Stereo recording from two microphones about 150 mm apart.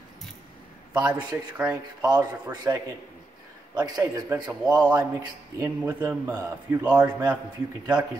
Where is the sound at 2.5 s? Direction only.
25° right (ahead or behind).